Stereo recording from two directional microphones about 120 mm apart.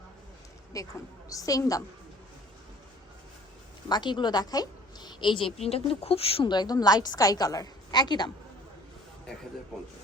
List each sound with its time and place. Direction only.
0.7 s a woman's voice: 25° left (ahead or behind)
3.8 s a woman's voice: 40° left (ahead or behind)
5.5 s speech: 55° left (ahead or behind)
6.5 s a woman's voice: 35° left (ahead or behind)